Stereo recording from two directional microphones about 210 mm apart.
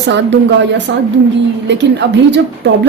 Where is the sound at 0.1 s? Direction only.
55° right (ahead or behind).